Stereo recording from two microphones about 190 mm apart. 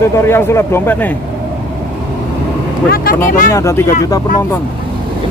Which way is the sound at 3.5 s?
15° left (ahead or behind).